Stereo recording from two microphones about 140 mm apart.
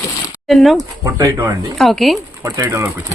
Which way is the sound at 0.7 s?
20° right (ahead or behind).